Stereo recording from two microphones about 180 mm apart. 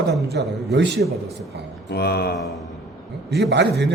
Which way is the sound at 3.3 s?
70° right (ahead or behind).